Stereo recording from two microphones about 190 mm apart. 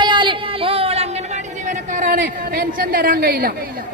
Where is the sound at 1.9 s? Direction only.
45° right (ahead or behind).